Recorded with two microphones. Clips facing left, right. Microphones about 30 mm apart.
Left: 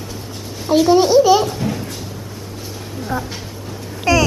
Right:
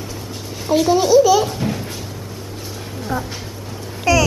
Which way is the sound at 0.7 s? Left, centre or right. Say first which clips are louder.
Left 2 dB; centre.